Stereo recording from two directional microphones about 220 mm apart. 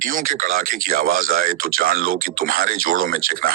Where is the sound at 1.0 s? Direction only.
40° right (ahead or behind).